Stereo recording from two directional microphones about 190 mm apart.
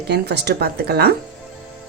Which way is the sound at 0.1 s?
60° right (ahead or behind).